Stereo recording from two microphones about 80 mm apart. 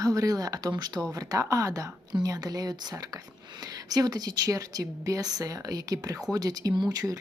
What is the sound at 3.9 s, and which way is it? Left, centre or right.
Speech, right.